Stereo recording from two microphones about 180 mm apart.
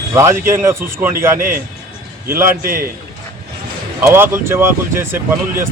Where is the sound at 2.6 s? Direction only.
55° right (ahead or behind).